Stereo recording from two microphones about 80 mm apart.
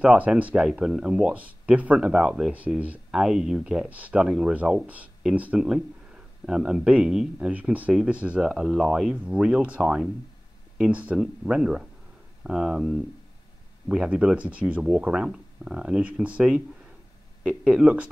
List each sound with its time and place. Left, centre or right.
0.0 s speech: centre
8.4 s speech: centre